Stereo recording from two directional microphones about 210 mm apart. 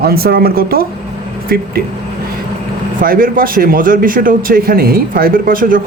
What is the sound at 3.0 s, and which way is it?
Speech, 45° right (ahead or behind).